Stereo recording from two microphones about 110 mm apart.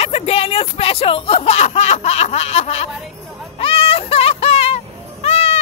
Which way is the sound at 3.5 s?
60° left (ahead or behind).